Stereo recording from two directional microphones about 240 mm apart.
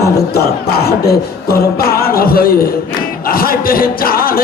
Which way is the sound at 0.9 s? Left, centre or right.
Left.